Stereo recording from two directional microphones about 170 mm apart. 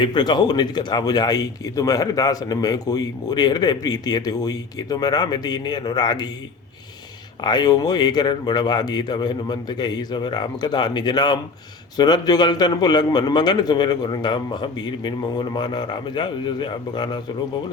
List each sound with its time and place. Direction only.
0.0 s speech: 25° left (ahead or behind)
7.4 s speech: 25° left (ahead or behind)